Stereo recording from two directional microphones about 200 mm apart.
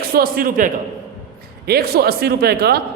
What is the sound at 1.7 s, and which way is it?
A man's voice, 50° right (ahead or behind).